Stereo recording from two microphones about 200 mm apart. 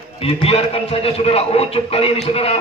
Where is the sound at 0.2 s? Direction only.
30° left (ahead or behind).